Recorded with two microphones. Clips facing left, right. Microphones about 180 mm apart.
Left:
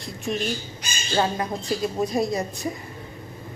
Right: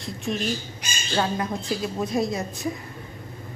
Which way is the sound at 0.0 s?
Centre (ahead or behind).